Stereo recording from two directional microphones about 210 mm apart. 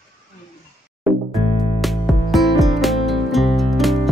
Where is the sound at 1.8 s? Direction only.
Centre (ahead or behind).